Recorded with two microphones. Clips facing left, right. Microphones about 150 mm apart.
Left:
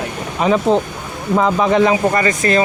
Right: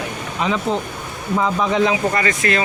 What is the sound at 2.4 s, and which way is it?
Speech, 30° left (ahead or behind).